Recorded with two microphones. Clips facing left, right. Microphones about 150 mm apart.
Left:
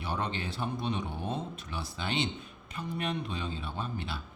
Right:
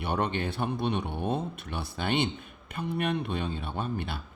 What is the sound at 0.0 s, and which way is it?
Speech, 60° right (ahead or behind).